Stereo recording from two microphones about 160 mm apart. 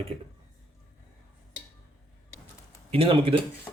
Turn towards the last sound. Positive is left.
turn(degrees=-35)  # may be behind; listen again after turning